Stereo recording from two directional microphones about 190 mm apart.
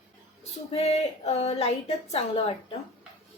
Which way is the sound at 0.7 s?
35° left (ahead or behind).